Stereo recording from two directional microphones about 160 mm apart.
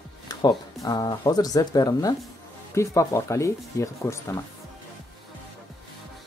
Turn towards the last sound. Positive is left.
turn(degrees=20)  # may be behind; listen again after turning